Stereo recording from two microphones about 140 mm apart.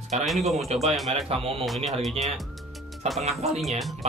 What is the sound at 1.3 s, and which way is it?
Speech, 45° right (ahead or behind).